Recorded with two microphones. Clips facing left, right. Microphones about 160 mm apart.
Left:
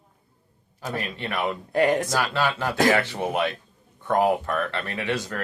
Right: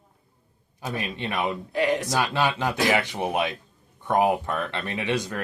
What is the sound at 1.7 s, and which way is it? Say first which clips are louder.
Speech: left 5 dB; 50° left (ahead or behind).